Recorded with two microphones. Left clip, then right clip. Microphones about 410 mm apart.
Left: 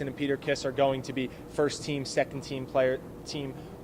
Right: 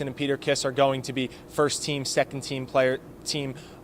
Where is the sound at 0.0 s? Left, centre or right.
Right.